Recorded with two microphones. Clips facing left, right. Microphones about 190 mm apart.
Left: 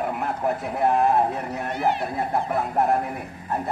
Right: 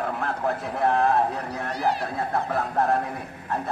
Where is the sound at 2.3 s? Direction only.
15° left (ahead or behind).